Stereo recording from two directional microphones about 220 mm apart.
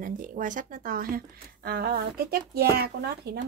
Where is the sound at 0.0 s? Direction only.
35° right (ahead or behind).